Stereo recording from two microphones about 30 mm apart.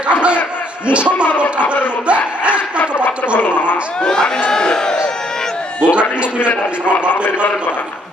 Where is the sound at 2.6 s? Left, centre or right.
Left.